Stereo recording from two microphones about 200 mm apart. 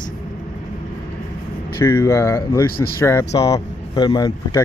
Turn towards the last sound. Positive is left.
turn(degrees=20)  # may be behind; listen again after turning